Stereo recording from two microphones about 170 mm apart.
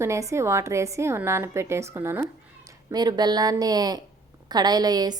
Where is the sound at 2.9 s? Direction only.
25° right (ahead or behind).